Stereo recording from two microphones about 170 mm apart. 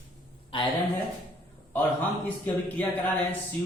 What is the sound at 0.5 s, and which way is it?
Speech, 30° left (ahead or behind).